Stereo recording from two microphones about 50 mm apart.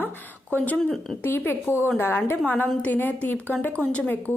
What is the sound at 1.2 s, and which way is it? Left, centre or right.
A woman's voice, left.